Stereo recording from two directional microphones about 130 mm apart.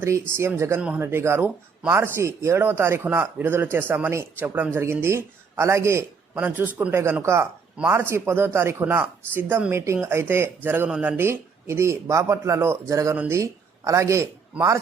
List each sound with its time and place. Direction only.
0.0 s speech: 20° right (ahead or behind)
0.8 s a man's voice: 10° right (ahead or behind)
1.0 s a man's voice: 20° right (ahead or behind)